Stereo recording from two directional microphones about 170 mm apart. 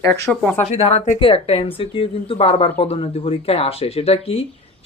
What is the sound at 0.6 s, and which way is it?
Speech, 35° left (ahead or behind).